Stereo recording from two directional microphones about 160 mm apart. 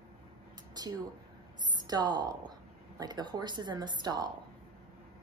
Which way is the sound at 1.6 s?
25° right (ahead or behind).